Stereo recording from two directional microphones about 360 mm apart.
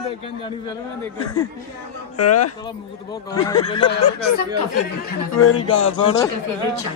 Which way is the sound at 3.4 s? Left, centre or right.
Centre.